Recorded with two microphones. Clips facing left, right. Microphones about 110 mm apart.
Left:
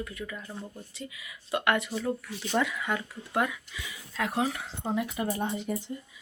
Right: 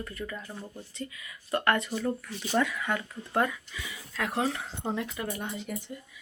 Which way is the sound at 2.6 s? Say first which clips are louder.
Right 1 dB; 15° left (ahead or behind).